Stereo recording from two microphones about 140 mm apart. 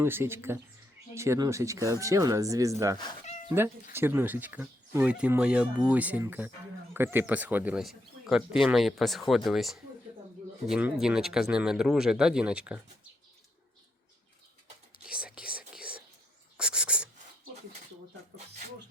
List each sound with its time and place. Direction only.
0.0 s speech: 15° right (ahead or behind)
15.0 s whispering: 5° right (ahead or behind)
16.6 s owl: 5° right (ahead or behind)